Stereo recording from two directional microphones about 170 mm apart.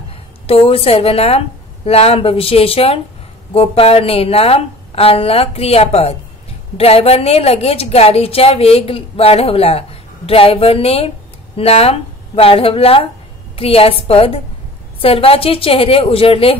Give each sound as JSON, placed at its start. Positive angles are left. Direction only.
{"t": 0.5, "sound": "a woman's voice", "side_deg": 35}